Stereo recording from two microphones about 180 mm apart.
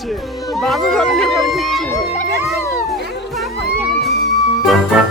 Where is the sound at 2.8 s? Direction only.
Centre (ahead or behind).